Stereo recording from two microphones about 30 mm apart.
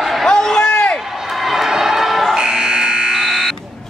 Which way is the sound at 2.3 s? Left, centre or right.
Right.